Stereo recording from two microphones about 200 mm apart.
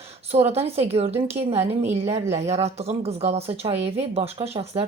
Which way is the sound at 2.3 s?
30° right (ahead or behind).